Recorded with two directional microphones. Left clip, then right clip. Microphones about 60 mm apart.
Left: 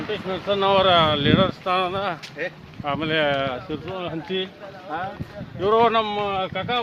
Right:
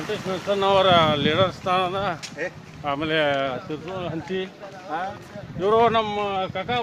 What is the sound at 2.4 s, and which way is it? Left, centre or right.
Speech, left.